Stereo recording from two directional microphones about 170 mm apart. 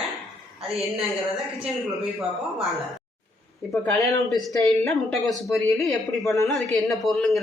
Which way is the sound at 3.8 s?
10° left (ahead or behind).